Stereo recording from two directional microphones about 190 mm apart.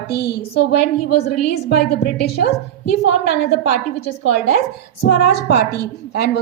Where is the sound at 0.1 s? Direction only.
60° left (ahead or behind).